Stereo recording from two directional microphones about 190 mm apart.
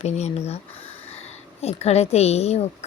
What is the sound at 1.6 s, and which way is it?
Speech, 35° left (ahead or behind).